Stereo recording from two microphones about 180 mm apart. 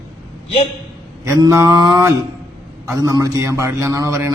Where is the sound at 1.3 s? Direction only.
15° right (ahead or behind).